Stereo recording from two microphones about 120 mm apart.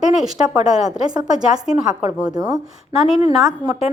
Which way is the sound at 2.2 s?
30° right (ahead or behind).